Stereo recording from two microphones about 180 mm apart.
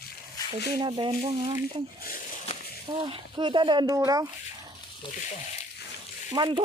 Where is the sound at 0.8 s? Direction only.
25° right (ahead or behind).